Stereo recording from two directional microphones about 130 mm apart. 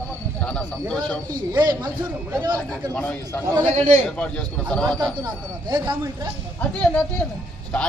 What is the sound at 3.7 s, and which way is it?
Speech, 65° right (ahead or behind).